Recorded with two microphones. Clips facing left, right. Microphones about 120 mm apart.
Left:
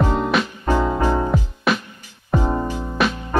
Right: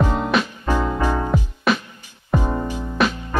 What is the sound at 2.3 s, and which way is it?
Music, 20° left (ahead or behind).